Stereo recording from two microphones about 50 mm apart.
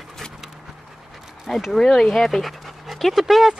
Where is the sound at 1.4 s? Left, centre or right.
Centre.